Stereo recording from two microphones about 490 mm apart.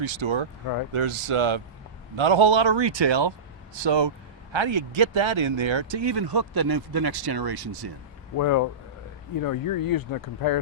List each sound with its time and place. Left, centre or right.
0.0 s a man's voice: right
0.9 s a man's voice: right
8.4 s speech: left